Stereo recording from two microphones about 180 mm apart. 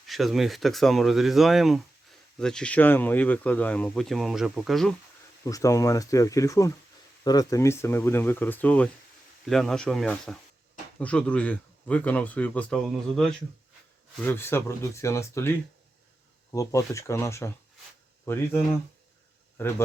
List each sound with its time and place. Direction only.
0.1 s speech: centre (ahead or behind)
5.5 s speech: 20° left (ahead or behind)